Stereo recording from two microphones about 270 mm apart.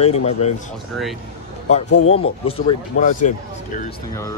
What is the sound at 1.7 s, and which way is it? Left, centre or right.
Speech, left.